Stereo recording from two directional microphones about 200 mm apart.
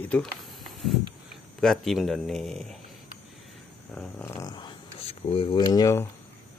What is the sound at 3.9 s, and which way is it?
Speech, 10° left (ahead or behind).